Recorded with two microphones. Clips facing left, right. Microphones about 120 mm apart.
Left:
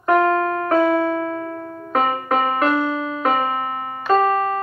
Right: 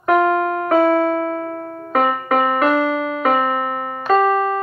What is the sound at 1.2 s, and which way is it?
Music, 55° right (ahead or behind).